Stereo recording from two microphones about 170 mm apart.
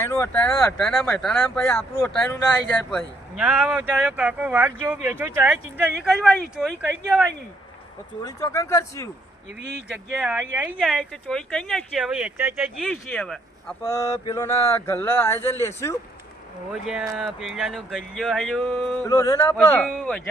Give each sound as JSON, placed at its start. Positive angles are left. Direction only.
{"t": 0.0, "sound": "speech", "side_deg": 15}
{"t": 2.9, "sound": "speech", "side_deg": -5}
{"t": 8.2, "sound": "speech", "side_deg": 20}
{"t": 9.9, "sound": "speech", "side_deg": -5}
{"t": 13.8, "sound": "speech", "side_deg": 20}
{"t": 16.8, "sound": "speech", "side_deg": 0}
{"t": 19.0, "sound": "speech", "side_deg": 20}